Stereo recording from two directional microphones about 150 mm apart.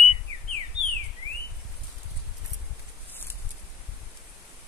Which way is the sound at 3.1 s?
15° left (ahead or behind).